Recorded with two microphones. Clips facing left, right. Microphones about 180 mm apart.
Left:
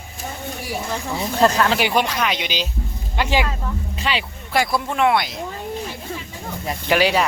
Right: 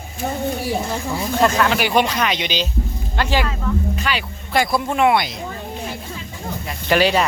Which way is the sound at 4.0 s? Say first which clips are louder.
Even; 25° left (ahead or behind).